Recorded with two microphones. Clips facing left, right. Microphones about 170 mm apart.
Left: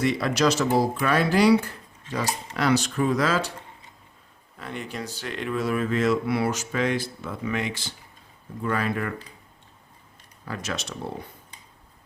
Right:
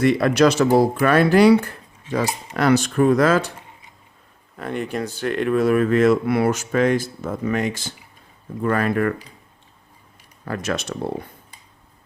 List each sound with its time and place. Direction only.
0.0 s speech: 55° right (ahead or behind)
4.5 s speech: 55° right (ahead or behind)
10.4 s speech: 55° right (ahead or behind)